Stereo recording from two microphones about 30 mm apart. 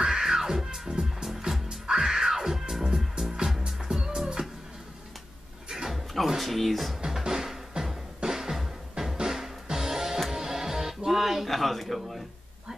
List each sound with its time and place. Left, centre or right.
0.0 s music: centre
3.8 s music: right
6.2 s speech: centre
7.1 s drum: centre
8.2 s music: centre
11.1 s a sound: centre